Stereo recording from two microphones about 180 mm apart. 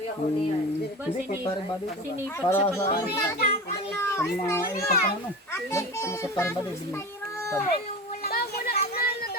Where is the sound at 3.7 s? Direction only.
15° left (ahead or behind).